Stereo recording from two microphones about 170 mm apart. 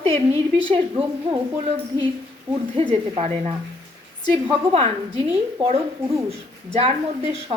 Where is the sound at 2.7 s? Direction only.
35° right (ahead or behind).